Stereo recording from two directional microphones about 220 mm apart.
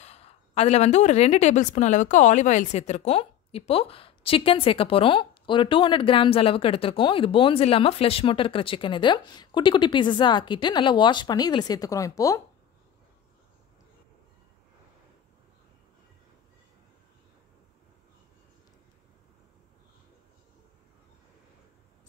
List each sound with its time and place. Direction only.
0.0 s a woman's voice: 30° left (ahead or behind)